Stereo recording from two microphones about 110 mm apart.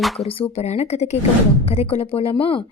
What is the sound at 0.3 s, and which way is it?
Speech, 60° left (ahead or behind).